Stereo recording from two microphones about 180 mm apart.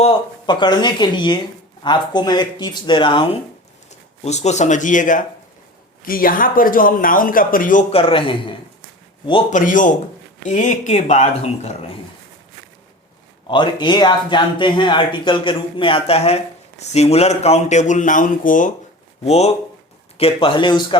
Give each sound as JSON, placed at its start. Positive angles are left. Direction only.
{"t": 0.0, "sound": "speech", "side_deg": 30}
{"t": 4.2, "sound": "speech", "side_deg": 40}
{"t": 7.9, "sound": "speech", "side_deg": 30}
{"t": 9.5, "sound": "speech", "side_deg": 45}
{"t": 13.5, "sound": "speech", "side_deg": 25}
{"t": 19.2, "sound": "speech", "side_deg": 35}